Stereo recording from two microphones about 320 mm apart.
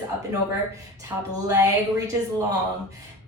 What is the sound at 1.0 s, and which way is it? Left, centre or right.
A woman's voice, centre.